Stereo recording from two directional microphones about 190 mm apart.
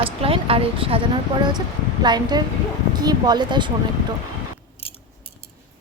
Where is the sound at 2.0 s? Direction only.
20° right (ahead or behind).